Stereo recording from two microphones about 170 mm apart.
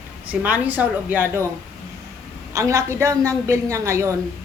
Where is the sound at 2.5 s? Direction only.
20° right (ahead or behind).